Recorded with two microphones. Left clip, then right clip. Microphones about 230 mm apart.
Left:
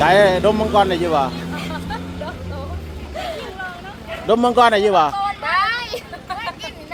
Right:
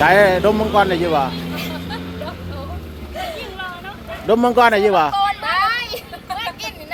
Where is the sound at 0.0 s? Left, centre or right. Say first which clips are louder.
Right 1 dB; centre.